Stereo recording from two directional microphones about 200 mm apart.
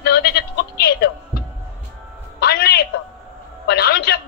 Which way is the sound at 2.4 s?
50° left (ahead or behind).